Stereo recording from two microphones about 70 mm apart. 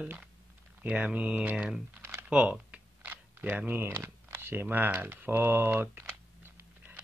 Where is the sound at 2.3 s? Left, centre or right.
Centre.